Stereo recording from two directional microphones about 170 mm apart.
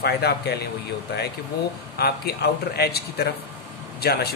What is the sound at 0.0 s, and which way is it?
Speech, 75° left (ahead or behind).